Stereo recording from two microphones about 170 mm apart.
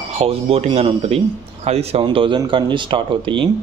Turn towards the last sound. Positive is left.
turn(degrees=-30)  # may be behind; listen again after turning